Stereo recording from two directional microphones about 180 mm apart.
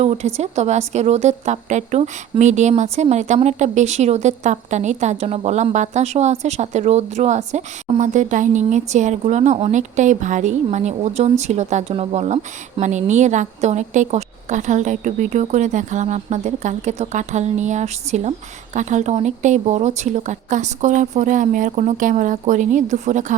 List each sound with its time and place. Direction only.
0.0 s speech: 35° right (ahead or behind)